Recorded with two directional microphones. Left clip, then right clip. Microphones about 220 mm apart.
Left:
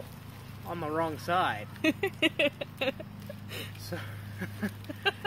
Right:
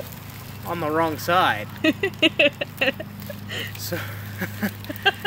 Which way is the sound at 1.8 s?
40° left (ahead or behind).